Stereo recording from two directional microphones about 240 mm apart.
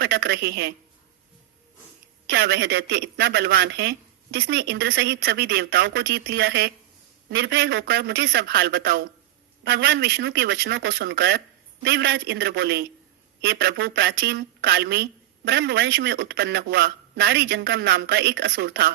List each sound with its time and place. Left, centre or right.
0.0 s a woman's voice: right
2.3 s a woman's voice: right